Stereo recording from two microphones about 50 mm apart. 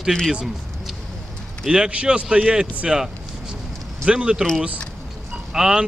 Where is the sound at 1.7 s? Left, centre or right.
Right.